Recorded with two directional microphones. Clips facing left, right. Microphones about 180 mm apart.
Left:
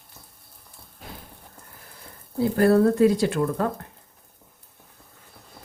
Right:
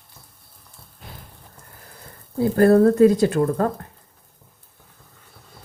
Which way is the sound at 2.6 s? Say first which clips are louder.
Right 4 dB; 45° right (ahead or behind).